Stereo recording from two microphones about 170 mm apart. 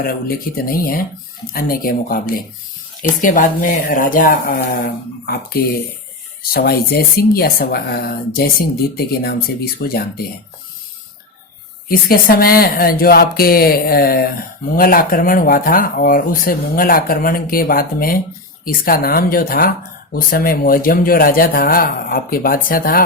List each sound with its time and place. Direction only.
0.0 s speech: 60° left (ahead or behind)
9.7 s speech: 60° left (ahead or behind)
11.9 s speech: 60° left (ahead or behind)